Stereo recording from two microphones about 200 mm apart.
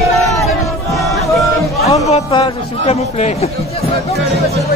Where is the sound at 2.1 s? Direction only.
30° left (ahead or behind).